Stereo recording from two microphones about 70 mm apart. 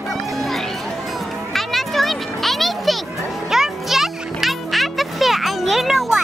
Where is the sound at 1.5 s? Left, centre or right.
Centre.